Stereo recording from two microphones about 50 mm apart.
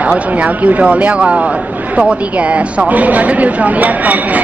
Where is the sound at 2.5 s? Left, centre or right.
Right.